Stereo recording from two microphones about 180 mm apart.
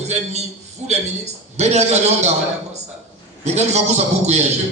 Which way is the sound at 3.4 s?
35° right (ahead or behind).